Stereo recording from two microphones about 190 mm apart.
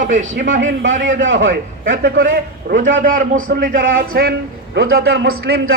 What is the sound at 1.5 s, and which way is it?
A man's voice, 45° right (ahead or behind).